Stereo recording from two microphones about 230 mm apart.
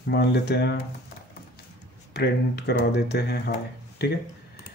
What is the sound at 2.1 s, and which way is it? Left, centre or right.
Speech, left.